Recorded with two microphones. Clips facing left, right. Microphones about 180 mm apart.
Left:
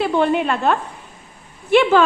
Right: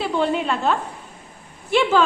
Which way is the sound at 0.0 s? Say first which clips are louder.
Left 4 dB; 60° left (ahead or behind).